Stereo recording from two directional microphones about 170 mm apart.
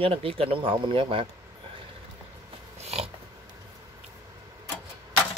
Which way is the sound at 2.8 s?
40° right (ahead or behind).